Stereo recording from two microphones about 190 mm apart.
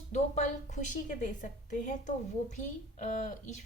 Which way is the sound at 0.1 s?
40° left (ahead or behind).